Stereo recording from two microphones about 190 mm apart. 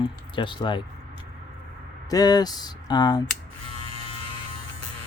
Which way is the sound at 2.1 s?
20° left (ahead or behind).